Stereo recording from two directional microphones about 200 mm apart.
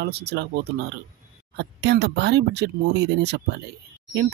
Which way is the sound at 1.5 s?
60° right (ahead or behind).